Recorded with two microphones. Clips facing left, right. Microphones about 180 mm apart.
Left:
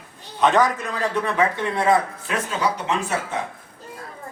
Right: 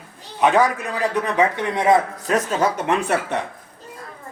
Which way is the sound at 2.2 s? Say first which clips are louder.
Right 4 dB; 40° right (ahead or behind).